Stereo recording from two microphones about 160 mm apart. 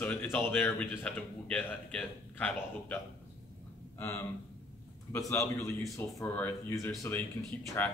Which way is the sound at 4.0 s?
15° left (ahead or behind).